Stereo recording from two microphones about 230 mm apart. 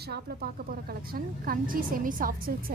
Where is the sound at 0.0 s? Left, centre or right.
Right.